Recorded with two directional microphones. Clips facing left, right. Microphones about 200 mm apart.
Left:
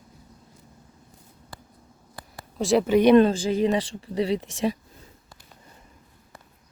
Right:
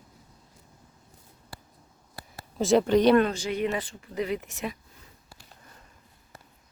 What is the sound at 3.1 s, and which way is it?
Speech, 30° left (ahead or behind).